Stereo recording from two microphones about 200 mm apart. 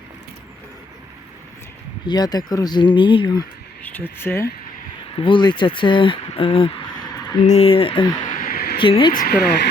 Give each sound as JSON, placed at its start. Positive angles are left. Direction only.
{"t": 2.0, "sound": "speech", "side_deg": 20}
{"t": 3.8, "sound": "speech", "side_deg": 10}
{"t": 5.1, "sound": "speech", "side_deg": 25}
{"t": 8.3, "sound": "a sound", "side_deg": 45}
{"t": 8.8, "sound": "speech", "side_deg": 25}
{"t": 9.1, "sound": "speech", "side_deg": 50}